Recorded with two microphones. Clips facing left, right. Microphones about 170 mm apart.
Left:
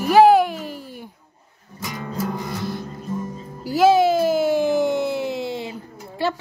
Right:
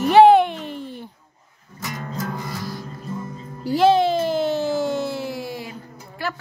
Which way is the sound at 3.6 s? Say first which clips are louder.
Left 1 dB; 5° left (ahead or behind).